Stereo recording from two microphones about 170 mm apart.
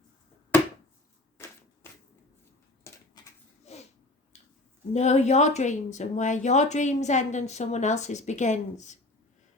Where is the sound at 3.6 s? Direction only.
40° left (ahead or behind).